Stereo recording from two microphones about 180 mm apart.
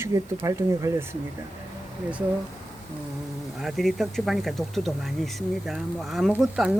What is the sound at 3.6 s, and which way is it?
Speech, centre (ahead or behind).